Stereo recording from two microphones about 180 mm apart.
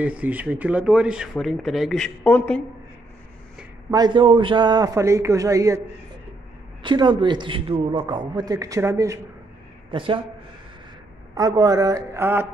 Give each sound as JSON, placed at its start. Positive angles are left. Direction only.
{"t": 0.0, "sound": "speech", "side_deg": -10}
{"t": 3.9, "sound": "a man's voice", "side_deg": -25}
{"t": 6.8, "sound": "a man's voice", "side_deg": -25}
{"t": 9.8, "sound": "speech", "side_deg": -30}
{"t": 11.3, "sound": "a man's voice", "side_deg": -20}